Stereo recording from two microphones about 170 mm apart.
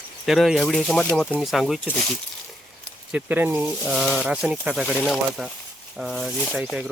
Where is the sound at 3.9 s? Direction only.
Centre (ahead or behind).